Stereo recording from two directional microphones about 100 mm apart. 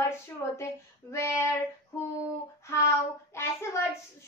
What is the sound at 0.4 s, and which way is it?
A woman's voice, 25° left (ahead or behind).